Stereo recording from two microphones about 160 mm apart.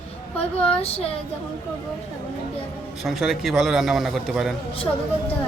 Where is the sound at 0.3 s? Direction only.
40° left (ahead or behind).